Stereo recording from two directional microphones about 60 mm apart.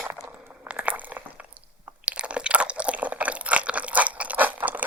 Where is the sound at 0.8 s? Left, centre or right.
Right.